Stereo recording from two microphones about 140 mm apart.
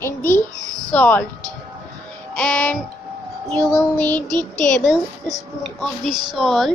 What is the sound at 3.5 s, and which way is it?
Child singing, 5° left (ahead or behind).